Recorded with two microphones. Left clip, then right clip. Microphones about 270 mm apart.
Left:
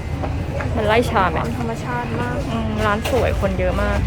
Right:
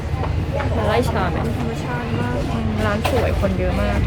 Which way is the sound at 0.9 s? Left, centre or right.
Left.